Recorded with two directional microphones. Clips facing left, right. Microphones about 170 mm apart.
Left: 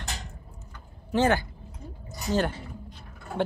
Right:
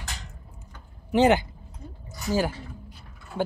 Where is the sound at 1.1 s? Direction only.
20° right (ahead or behind).